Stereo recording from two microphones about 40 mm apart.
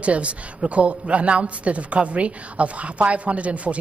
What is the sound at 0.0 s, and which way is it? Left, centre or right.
A man's voice, right.